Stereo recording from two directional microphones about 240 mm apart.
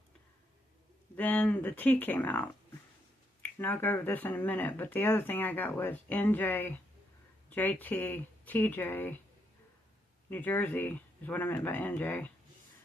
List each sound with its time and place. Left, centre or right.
1.1 s speech: centre
10.2 s speech: centre